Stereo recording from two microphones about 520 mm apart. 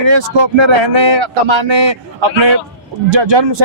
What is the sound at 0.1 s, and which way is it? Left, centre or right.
Speech, right.